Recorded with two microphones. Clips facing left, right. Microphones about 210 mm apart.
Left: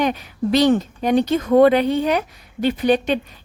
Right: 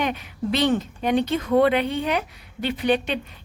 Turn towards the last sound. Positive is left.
turn(degrees=40)  # may be behind; listen again after turning